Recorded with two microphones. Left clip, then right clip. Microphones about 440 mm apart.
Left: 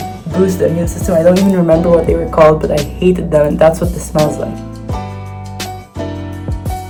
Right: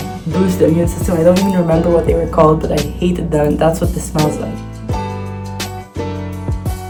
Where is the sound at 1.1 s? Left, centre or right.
Centre.